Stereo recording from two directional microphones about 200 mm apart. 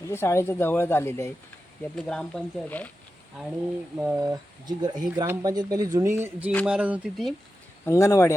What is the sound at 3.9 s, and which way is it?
Speech, 5° right (ahead or behind).